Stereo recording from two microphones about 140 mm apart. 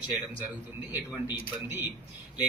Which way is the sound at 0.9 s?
15° right (ahead or behind).